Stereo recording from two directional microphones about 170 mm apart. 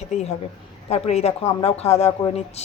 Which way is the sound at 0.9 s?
40° left (ahead or behind).